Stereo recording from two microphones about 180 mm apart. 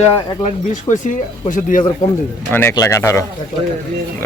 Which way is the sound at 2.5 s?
15° left (ahead or behind).